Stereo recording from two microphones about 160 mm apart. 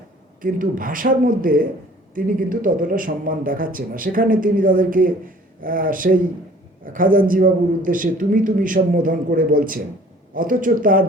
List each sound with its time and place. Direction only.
0.4 s speech: 60° right (ahead or behind)